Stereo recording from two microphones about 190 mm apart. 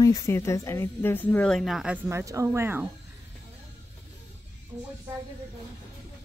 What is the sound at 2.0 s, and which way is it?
Speech, 15° right (ahead or behind).